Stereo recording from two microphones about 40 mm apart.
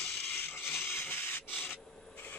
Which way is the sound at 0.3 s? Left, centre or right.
Left.